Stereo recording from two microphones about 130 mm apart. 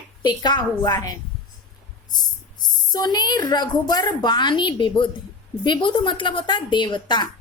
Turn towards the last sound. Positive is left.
turn(degrees=35)  # may be behind; listen again after turning